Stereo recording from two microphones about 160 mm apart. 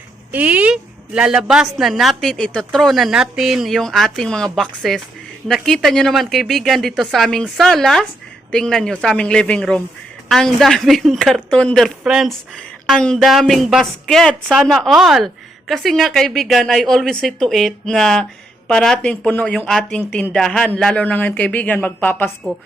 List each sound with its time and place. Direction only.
0.3 s speech: 10° right (ahead or behind)
12.0 s speech: 5° right (ahead or behind); by 22.3 s 10° left (ahead or behind)